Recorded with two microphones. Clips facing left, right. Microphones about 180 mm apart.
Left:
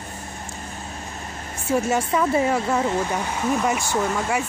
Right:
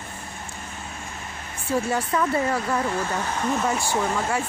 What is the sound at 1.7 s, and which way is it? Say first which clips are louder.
Speech: left 3 dB; 25° left (ahead or behind).